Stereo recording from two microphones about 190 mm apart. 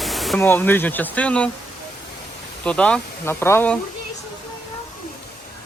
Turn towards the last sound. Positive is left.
turn(degrees=10)  # may be behind; listen again after turning